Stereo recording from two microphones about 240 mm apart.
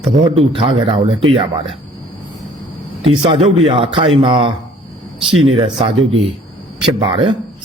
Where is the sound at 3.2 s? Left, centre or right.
Right.